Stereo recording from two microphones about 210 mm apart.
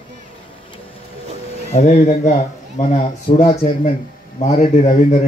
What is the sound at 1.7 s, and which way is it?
Speech, 30° left (ahead or behind).